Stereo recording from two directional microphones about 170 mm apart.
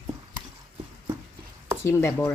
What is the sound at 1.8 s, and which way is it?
Speech, 15° left (ahead or behind).